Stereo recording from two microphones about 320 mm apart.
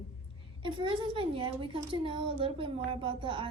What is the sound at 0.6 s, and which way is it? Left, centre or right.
A woman's voice, centre.